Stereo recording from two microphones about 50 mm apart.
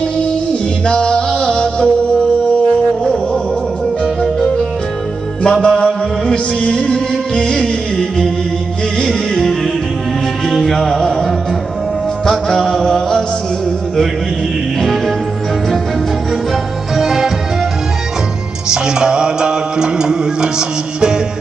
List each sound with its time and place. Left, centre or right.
0.8 s music: centre
4.0 s music: centre
14.8 s music: centre
16.9 s music: centre
18.7 s music: centre